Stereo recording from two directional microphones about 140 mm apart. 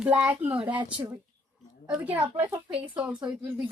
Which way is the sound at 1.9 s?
10° right (ahead or behind).